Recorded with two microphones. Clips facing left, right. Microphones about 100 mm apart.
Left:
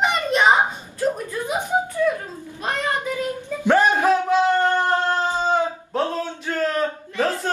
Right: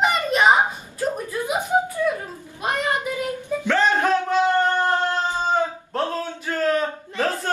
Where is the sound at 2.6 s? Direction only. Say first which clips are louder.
Right 1 dB; 15° right (ahead or behind).